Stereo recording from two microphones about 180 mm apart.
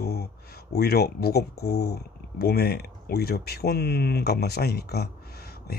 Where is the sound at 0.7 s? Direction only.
60° left (ahead or behind).